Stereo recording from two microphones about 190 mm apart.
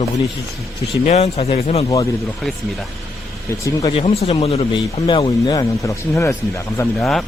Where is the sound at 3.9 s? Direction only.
30° left (ahead or behind); by 6.3 s 15° left (ahead or behind).